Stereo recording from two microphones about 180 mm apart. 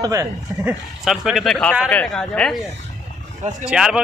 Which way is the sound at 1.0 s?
Centre (ahead or behind).